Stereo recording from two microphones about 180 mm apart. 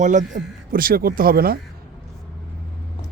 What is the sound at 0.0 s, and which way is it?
Speech, 45° right (ahead or behind).